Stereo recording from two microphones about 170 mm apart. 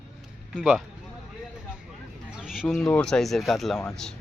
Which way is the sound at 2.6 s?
5° left (ahead or behind).